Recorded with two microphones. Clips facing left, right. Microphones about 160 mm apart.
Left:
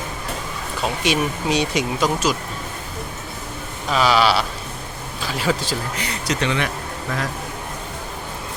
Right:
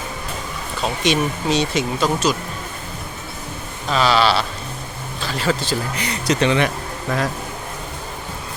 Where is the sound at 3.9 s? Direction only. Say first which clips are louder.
Even; 10° left (ahead or behind).